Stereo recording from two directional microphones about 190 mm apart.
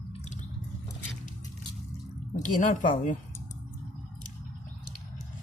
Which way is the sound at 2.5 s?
40° left (ahead or behind).